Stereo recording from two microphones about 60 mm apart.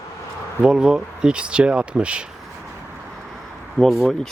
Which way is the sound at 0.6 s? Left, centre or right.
Centre.